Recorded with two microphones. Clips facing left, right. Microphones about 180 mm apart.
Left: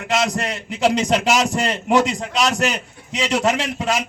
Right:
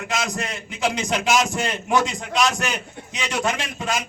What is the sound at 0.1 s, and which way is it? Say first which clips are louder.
Speech: left 7 dB; 70° left (ahead or behind).